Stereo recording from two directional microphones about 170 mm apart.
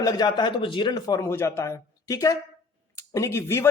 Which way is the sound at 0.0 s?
25° left (ahead or behind).